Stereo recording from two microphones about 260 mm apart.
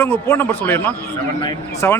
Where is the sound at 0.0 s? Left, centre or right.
Centre.